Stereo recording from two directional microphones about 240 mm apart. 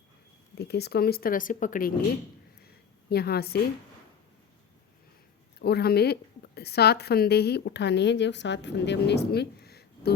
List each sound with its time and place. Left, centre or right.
0.5 s speech: left
3.1 s speech: left
5.5 s a woman's voice: left